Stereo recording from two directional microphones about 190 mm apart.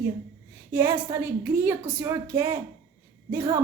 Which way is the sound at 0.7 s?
10° right (ahead or behind).